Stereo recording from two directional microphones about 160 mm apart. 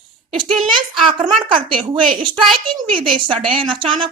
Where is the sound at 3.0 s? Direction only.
35° right (ahead or behind).